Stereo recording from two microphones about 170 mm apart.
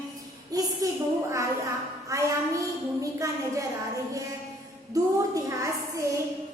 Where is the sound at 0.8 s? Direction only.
20° right (ahead or behind).